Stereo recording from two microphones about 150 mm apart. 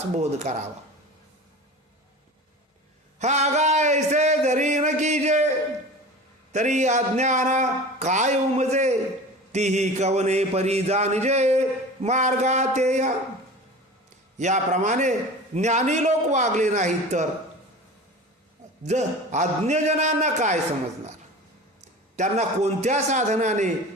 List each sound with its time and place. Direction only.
0.2 s a man's voice: 50° right (ahead or behind)
3.2 s speech: 50° right (ahead or behind)
6.5 s a man's voice: 50° right (ahead or behind)
14.3 s a man's voice: 50° right (ahead or behind)
18.8 s a man's voice: 50° right (ahead or behind)
22.1 s a man's voice: 50° right (ahead or behind)